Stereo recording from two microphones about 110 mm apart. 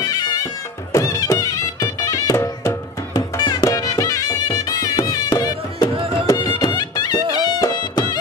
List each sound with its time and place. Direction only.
0.0 s music: 35° left (ahead or behind)